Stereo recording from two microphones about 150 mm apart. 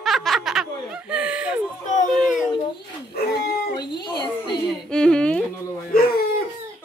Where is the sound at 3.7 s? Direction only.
30° left (ahead or behind).